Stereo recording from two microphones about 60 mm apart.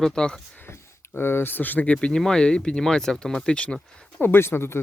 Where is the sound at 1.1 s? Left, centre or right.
Left; by 3.8 s centre.